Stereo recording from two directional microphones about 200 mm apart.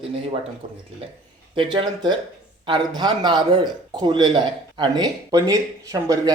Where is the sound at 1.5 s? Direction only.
20° right (ahead or behind).